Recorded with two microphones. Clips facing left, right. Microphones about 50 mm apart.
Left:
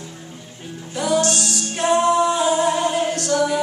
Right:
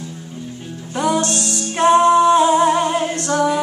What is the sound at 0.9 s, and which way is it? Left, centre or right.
Music, right.